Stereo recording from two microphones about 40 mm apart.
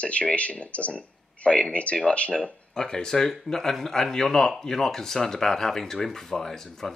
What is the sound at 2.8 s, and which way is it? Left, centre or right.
Speech, centre.